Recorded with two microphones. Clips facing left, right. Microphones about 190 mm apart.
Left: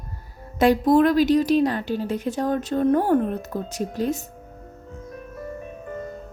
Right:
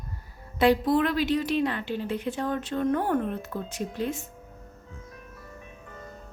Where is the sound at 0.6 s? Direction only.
45° left (ahead or behind).